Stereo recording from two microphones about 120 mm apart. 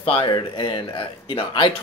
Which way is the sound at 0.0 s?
50° left (ahead or behind).